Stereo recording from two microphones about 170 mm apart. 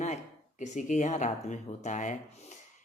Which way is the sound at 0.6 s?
45° left (ahead or behind).